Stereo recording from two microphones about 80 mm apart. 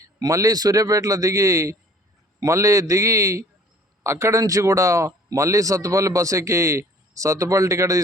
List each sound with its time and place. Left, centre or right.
0.0 s a man's voice: right